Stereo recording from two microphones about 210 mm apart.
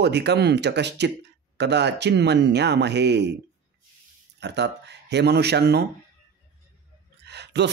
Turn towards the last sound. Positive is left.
turn(degrees=-55)  # may be behind; listen again after turning